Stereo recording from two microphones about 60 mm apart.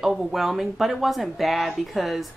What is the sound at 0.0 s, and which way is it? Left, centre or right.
Speech, centre.